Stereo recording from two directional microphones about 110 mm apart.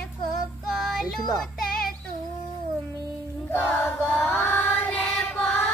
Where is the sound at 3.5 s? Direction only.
20° left (ahead or behind).